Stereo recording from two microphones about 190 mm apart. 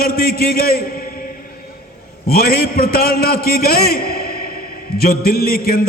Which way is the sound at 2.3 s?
55° left (ahead or behind).